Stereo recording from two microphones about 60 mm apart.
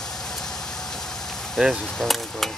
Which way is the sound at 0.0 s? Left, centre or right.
Centre.